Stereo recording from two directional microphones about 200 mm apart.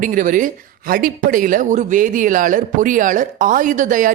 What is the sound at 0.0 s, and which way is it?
Speech, 40° right (ahead or behind).